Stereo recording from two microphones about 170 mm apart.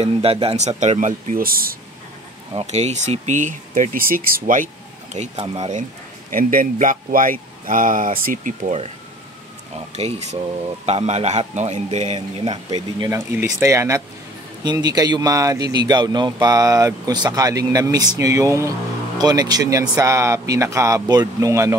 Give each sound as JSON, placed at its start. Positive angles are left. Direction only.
{"t": 0.0, "sound": "speech", "side_deg": -35}
{"t": 2.5, "sound": "speech", "side_deg": -40}
{"t": 5.1, "sound": "a man's voice", "side_deg": -35}
{"t": 6.3, "sound": "speech", "side_deg": -50}
{"t": 9.9, "sound": "a man's voice", "side_deg": -40}
{"t": 12.7, "sound": "speech", "side_deg": -20}